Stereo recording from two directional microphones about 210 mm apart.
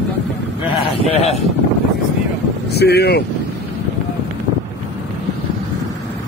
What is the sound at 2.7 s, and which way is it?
Speech, 50° left (ahead or behind).